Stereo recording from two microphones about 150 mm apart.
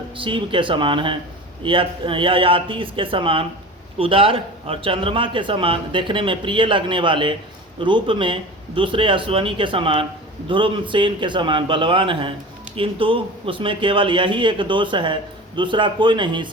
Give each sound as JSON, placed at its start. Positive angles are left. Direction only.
{"t": 0.2, "sound": "speech", "side_deg": -35}